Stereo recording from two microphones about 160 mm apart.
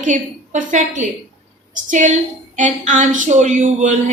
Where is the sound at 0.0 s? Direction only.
50° right (ahead or behind).